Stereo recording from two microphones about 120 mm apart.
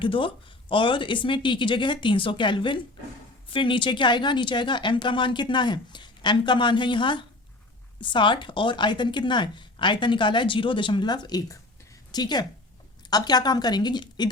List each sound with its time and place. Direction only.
0.0 s a woman's voice: 45° left (ahead or behind)